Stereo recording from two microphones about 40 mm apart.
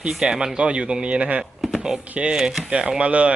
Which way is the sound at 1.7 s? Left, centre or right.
Centre.